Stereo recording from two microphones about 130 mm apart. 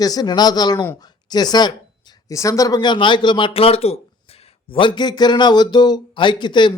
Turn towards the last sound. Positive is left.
turn(degrees=35)  # may be behind; listen again after turning